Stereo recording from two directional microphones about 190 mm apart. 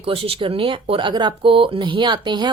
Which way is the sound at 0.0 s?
30° right (ahead or behind).